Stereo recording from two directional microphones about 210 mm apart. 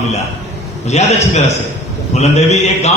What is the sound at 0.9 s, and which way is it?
A man's voice, 30° left (ahead or behind).